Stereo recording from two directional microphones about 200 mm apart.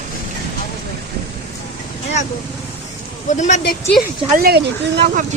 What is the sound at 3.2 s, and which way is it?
Speech, 35° left (ahead or behind).